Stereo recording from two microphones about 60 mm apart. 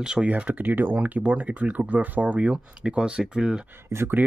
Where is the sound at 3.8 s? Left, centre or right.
Right.